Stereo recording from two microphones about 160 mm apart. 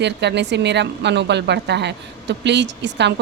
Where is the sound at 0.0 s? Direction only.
90° right.